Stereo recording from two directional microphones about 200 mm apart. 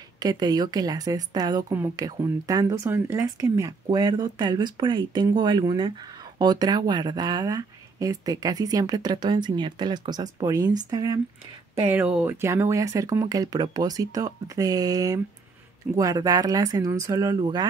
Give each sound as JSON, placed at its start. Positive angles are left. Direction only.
{"t": 0.2, "sound": "speech", "side_deg": -20}